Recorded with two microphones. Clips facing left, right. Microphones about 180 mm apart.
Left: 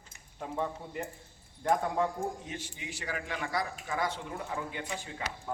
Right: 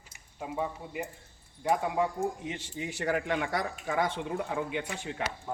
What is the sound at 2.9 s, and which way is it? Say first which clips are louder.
Speech: right 8 dB; 60° right (ahead or behind).